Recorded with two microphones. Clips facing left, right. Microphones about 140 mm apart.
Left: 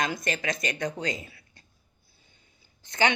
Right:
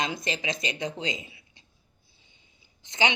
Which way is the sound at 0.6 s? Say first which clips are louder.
Left 1 dB; 50° left (ahead or behind).